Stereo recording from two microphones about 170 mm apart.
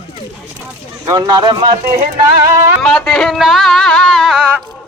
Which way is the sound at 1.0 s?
25° right (ahead or behind).